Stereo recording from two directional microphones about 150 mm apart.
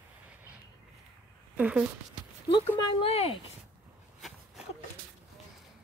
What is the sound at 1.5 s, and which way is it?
Speech, 10° right (ahead or behind).